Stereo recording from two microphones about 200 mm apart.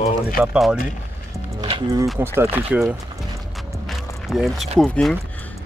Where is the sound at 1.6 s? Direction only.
20° right (ahead or behind).